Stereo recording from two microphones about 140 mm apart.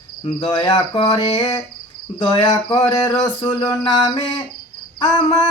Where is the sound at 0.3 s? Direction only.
30° left (ahead or behind).